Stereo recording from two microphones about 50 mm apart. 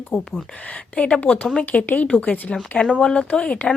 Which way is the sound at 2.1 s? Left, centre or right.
Left.